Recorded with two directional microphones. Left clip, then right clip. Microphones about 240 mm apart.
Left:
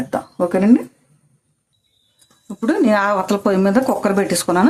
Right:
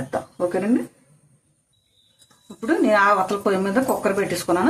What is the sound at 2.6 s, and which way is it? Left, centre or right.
Speech, left.